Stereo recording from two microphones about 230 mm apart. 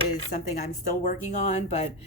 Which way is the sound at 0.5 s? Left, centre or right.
Left.